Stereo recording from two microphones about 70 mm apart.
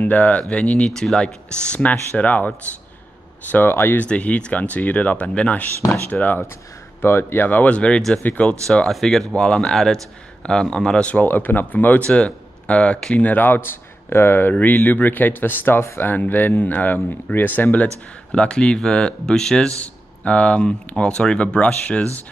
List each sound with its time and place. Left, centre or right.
0.0 s a man's voice: left
3.5 s speech: left
4.0 s speech: centre
7.0 s a man's voice: left; by 11.1 s centre
11.1 s speech: left
18.3 s a man's voice: centre